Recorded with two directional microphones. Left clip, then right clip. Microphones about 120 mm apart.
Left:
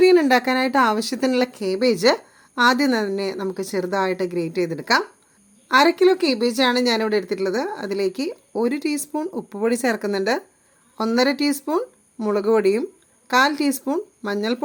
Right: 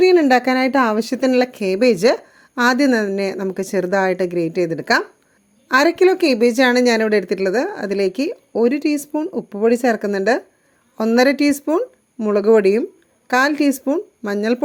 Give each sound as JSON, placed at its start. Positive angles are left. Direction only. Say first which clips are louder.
{"t": 0.0, "sound": "speech", "louder": "right 2 dB", "side_deg": -30}